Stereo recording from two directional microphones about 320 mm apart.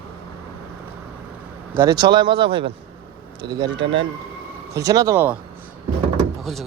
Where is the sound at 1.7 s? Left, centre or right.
Centre.